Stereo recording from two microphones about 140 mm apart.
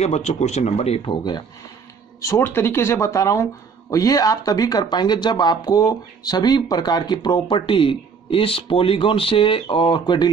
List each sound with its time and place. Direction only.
0.0 s speech: 50° left (ahead or behind); by 1.4 s 35° left (ahead or behind)
2.2 s speech: 15° left (ahead or behind)